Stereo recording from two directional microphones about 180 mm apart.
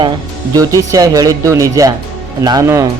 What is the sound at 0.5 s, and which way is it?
Speech, 20° right (ahead or behind).